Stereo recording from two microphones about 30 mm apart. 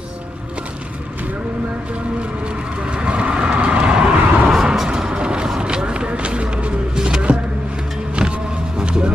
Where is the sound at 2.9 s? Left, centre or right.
Right.